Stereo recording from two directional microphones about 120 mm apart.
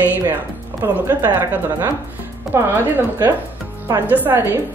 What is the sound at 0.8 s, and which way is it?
A man's voice, 15° right (ahead or behind).